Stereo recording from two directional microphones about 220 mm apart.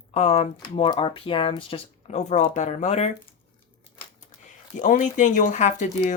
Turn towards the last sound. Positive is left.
turn(degrees=30)  # may be behind; listen again after turning